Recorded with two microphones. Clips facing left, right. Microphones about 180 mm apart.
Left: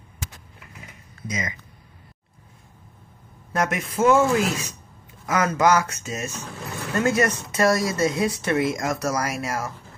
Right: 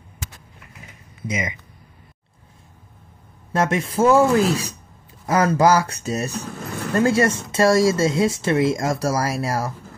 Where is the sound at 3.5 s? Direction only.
30° right (ahead or behind).